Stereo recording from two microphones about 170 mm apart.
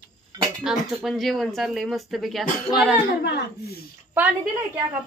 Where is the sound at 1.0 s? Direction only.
Centre (ahead or behind).